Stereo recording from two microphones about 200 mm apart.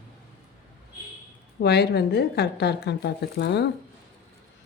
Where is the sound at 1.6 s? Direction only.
55° left (ahead or behind).